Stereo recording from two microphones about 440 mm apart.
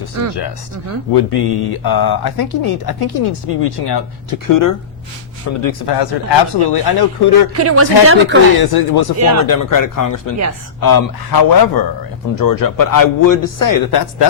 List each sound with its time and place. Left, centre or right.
1.1 s speech: left
5.5 s speech: left
5.8 s speech: left
7.5 s speech: right
8.6 s speech: left
9.1 s speech: right
9.5 s a man's voice: left